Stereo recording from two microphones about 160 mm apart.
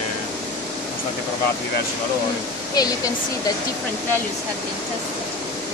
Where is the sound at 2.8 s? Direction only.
25° left (ahead or behind).